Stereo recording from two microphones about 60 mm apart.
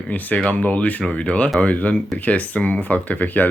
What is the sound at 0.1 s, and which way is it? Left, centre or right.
Speech, left.